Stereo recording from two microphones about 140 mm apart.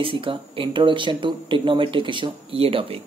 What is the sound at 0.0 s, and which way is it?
Speech, 40° right (ahead or behind).